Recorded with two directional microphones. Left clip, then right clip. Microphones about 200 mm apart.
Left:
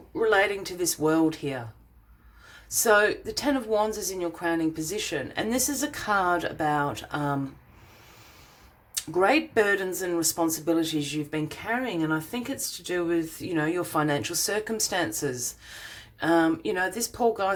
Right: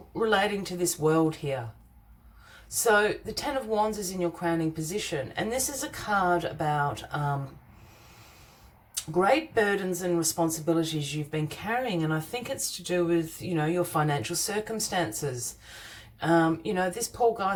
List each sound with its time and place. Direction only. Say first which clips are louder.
0.2 s speech: left 3 dB; 30° left (ahead or behind)
2.6 s speech: left 2 dB; 35° left (ahead or behind)
9.0 s speech: left 1 dB; 35° left (ahead or behind)